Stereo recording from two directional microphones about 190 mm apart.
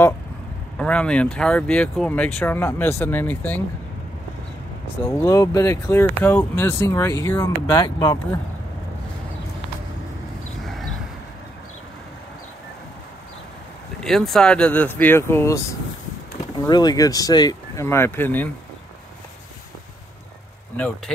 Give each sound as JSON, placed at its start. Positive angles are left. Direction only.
{"t": 0.7, "sound": "speech", "side_deg": 5}
{"t": 5.0, "sound": "speech", "side_deg": 15}
{"t": 14.0, "sound": "speech", "side_deg": 0}